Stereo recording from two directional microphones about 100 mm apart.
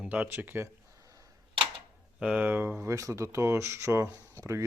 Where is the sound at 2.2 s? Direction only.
15° right (ahead or behind); by 4.7 s 30° right (ahead or behind).